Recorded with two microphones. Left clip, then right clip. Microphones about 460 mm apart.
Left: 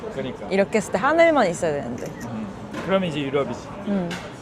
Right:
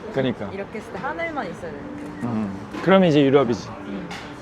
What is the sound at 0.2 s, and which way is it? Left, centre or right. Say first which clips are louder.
Speech: right 9 dB; right.